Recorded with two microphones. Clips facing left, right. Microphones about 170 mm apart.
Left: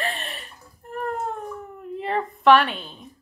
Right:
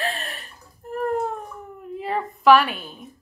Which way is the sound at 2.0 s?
5° right (ahead or behind).